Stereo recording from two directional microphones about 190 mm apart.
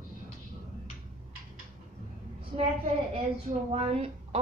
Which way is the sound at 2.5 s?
30° right (ahead or behind).